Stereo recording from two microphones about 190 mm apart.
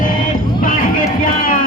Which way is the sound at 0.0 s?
45° left (ahead or behind).